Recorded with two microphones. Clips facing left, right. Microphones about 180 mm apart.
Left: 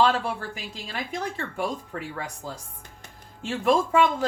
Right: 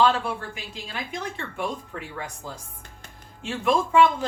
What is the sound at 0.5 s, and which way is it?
Speech, 40° left (ahead or behind).